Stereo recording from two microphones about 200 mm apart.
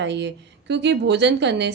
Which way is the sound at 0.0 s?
60° right (ahead or behind).